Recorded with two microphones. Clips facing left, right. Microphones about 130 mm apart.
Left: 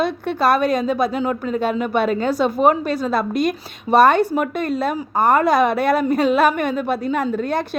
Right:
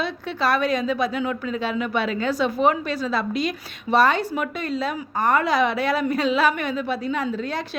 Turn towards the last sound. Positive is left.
turn(degrees=55)  # may be behind; listen again after turning